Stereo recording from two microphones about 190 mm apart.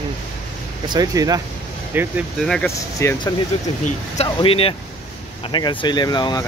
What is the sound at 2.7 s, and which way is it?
Speech, 15° left (ahead or behind).